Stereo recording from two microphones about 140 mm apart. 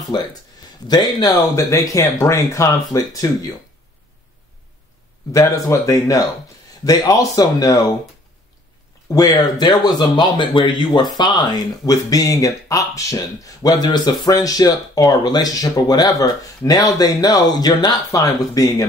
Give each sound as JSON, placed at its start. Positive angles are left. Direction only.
{"t": 0.0, "sound": "speech", "side_deg": 30}
{"t": 5.3, "sound": "speech", "side_deg": 20}
{"t": 9.1, "sound": "speech", "side_deg": 30}